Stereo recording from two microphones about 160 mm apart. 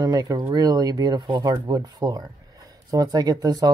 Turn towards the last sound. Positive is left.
turn(degrees=-25)  # may be behind; listen again after turning